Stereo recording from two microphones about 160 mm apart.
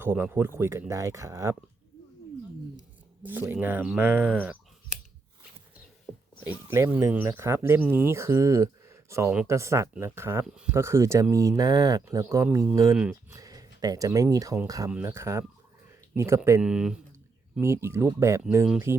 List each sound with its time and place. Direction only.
0.0 s speech: 15° right (ahead or behind)
3.5 s speech: 10° right (ahead or behind)
6.1 s wild animals: 10° right (ahead or behind)
6.4 s speech: 15° right (ahead or behind)
13.3 s speech: 20° right (ahead or behind)
16.6 s speech: 5° right (ahead or behind)
17.6 s speech: 15° right (ahead or behind)